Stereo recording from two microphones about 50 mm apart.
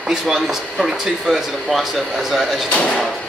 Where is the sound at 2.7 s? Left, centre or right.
Left.